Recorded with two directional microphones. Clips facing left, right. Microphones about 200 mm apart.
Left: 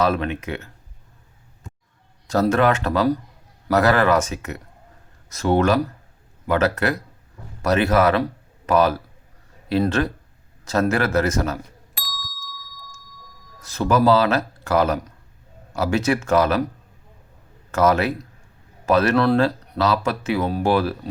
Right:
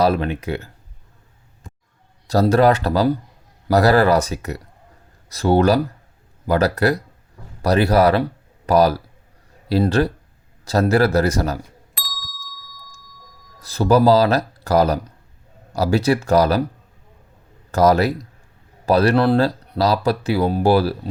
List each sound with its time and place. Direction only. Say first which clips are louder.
0.0 s speech: right 3 dB; 35° right (ahead or behind)
2.2 s a man's voice: right 3 dB; 35° right (ahead or behind)
11.9 s ding: left 1 dB; centre (ahead or behind)
13.6 s speech: right 4 dB; 35° right (ahead or behind)
17.7 s speech: right 3 dB; 35° right (ahead or behind)